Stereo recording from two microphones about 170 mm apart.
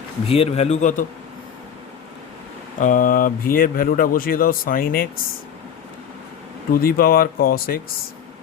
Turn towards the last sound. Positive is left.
turn(degrees=60)  # may be behind; listen again after turning